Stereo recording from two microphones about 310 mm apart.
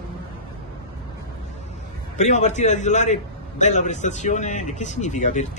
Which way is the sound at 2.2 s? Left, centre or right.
Left.